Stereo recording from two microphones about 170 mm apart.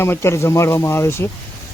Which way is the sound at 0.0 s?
15° left (ahead or behind).